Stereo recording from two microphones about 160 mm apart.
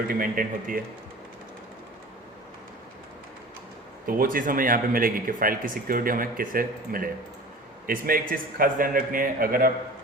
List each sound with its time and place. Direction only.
0.1 s speech: 60° right (ahead or behind)
4.0 s speech: 60° right (ahead or behind)